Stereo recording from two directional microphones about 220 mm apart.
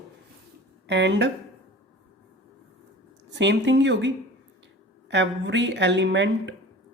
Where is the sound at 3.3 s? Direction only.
55° right (ahead or behind).